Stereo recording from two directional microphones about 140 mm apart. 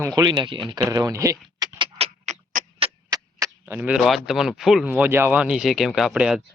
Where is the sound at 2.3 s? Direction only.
55° right (ahead or behind).